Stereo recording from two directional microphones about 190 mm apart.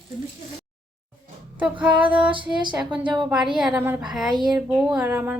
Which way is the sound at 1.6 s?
5° right (ahead or behind).